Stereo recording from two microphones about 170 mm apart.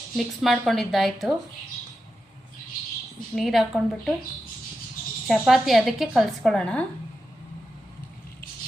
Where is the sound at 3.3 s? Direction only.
Centre (ahead or behind).